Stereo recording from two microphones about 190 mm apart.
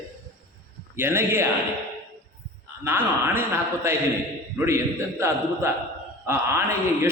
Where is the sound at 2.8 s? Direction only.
10° right (ahead or behind).